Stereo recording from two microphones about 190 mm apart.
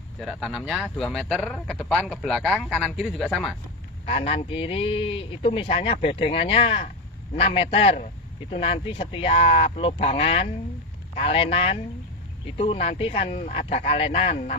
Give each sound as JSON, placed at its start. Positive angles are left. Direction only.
{"t": 0.2, "sound": "speech", "side_deg": 0}
{"t": 4.0, "sound": "speech", "side_deg": 30}